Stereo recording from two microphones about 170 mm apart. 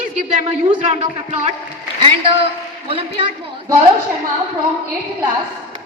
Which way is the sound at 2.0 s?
30° right (ahead or behind).